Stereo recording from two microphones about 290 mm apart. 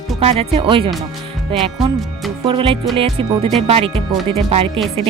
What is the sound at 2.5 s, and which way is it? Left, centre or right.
Speech, centre.